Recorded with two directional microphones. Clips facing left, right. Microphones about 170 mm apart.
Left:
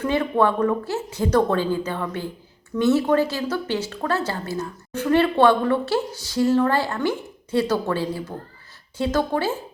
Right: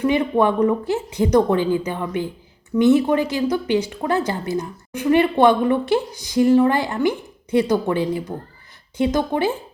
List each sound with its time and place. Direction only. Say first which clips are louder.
0.0 s speech: right 3 dB; 15° right (ahead or behind)